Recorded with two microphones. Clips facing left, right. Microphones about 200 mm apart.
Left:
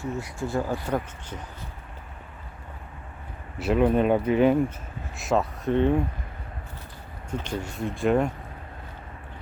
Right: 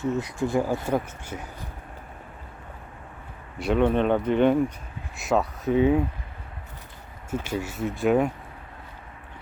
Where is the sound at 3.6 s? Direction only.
5° left (ahead or behind).